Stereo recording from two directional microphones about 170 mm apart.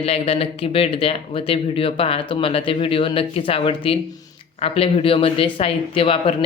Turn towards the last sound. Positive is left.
turn(degrees=30)  # may be behind; listen again after turning